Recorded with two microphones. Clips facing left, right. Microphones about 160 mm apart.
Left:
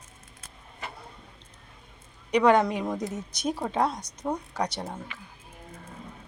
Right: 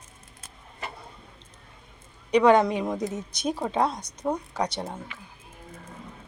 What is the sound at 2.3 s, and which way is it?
Speech, 25° right (ahead or behind).